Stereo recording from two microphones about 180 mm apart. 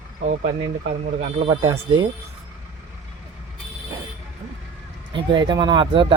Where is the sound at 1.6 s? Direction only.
20° right (ahead or behind).